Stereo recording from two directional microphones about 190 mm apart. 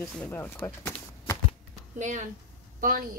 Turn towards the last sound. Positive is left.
turn(degrees=-50)  # may be behind; listen again after turning